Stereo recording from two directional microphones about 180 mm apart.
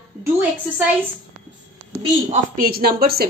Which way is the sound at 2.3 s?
55° right (ahead or behind).